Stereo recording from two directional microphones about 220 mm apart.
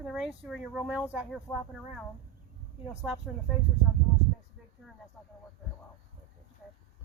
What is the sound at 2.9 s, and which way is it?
Speech, 5° right (ahead or behind).